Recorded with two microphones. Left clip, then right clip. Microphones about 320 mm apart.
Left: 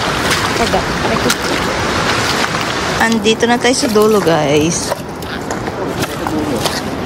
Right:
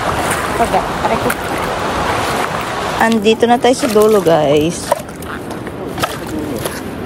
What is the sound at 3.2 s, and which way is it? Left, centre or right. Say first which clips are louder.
Speech: right 1 dB; centre.